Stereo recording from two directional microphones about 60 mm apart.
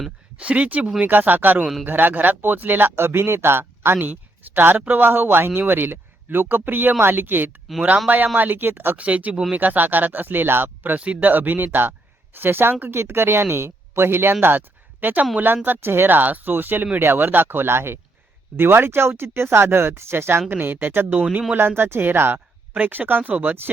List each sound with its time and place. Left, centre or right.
0.3 s speech: right
7.8 s speech: centre; by 9.0 s right
9.0 s speech: right
15.0 s speech: right